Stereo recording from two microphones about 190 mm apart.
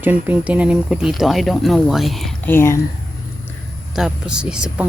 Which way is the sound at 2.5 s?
15° left (ahead or behind).